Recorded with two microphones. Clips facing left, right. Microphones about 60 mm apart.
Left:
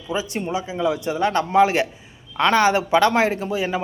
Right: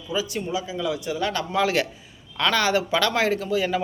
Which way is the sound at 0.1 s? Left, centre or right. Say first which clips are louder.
Left 2 dB; left.